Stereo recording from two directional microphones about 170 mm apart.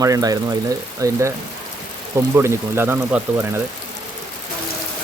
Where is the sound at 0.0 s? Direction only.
20° right (ahead or behind).